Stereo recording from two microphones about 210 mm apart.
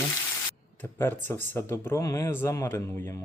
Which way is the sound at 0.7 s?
10° left (ahead or behind).